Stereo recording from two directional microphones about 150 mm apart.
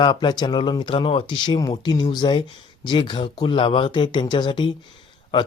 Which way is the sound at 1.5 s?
25° left (ahead or behind).